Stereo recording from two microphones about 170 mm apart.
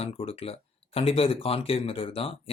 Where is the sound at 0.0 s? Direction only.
35° left (ahead or behind).